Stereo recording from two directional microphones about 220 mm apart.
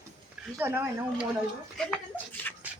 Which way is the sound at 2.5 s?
10° left (ahead or behind).